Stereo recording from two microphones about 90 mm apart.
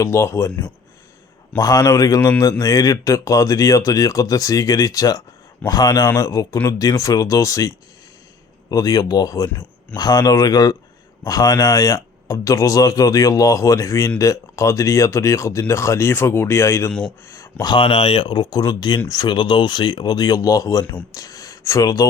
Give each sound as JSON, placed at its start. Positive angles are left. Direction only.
{"t": 0.0, "sound": "speech", "side_deg": 35}
{"t": 1.5, "sound": "speech", "side_deg": 45}
{"t": 17.6, "sound": "speech", "side_deg": 65}